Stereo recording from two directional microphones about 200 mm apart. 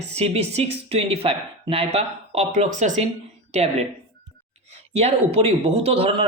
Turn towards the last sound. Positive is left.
turn(degrees=-30)  # may be behind; listen again after turning